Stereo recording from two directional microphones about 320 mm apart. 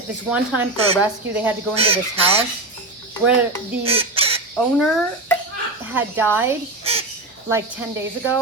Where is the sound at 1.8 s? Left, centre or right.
Centre.